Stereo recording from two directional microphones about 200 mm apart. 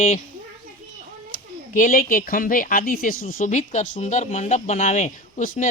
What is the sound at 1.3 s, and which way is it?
Speech, 40° left (ahead or behind).